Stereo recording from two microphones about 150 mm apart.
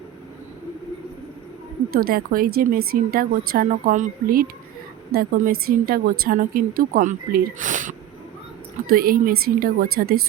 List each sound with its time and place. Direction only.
2.0 s a woman's voice: 75° right (ahead or behind); by 7.9 s 60° right (ahead or behind)
8.9 s a woman's voice: 75° right (ahead or behind)